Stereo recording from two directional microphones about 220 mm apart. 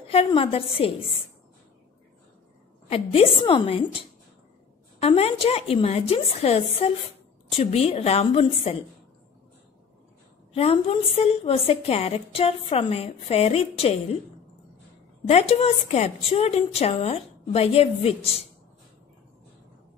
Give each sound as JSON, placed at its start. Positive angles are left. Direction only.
{"t": 0.0, "sound": "a woman's voice", "side_deg": 25}
{"t": 2.9, "sound": "a woman's voice", "side_deg": 25}
{"t": 5.0, "sound": "a woman's voice", "side_deg": 25}
{"t": 10.5, "sound": "a woman's voice", "side_deg": 25}
{"t": 15.2, "sound": "a woman's voice", "side_deg": 30}